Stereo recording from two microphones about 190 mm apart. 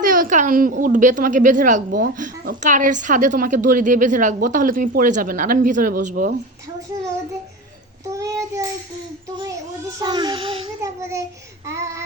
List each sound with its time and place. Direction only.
0.0 s a woman's voice: 45° right (ahead or behind)
8.0 s child singing: 15° right (ahead or behind)
10.0 s a child's voice: 25° right (ahead or behind)
10.8 s a child's voice: 15° right (ahead or behind)
11.6 s child singing: 15° right (ahead or behind)